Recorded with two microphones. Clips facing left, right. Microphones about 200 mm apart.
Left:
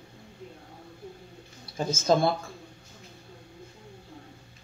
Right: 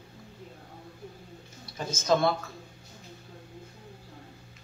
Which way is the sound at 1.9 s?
25° left (ahead or behind).